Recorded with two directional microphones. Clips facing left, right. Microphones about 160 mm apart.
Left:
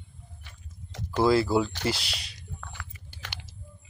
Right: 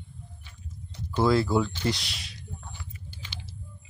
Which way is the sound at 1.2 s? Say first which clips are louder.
Left 1 dB; 5° left (ahead or behind).